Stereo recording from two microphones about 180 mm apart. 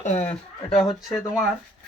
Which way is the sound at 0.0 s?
40° left (ahead or behind).